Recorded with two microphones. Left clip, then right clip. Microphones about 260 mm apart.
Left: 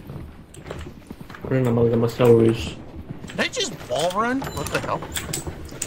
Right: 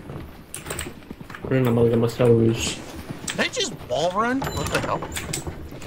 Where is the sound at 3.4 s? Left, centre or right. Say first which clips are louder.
Left 1 dB; centre.